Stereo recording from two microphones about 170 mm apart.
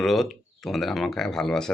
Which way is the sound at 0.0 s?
Centre (ahead or behind).